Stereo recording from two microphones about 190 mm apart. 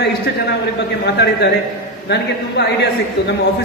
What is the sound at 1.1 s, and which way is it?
A man's voice, 60° left (ahead or behind).